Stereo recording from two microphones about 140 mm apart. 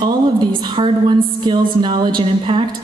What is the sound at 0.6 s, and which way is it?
A woman's voice, 35° right (ahead or behind).